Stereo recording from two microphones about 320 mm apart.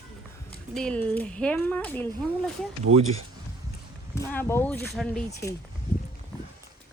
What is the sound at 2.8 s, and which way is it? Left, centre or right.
Speech, centre.